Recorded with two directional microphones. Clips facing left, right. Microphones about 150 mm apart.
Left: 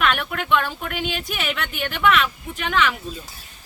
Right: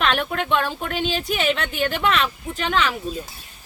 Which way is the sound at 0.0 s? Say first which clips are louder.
Right 1 dB; 30° right (ahead or behind).